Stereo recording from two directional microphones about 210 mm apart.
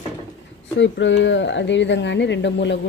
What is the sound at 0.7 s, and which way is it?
Speech, 60° left (ahead or behind).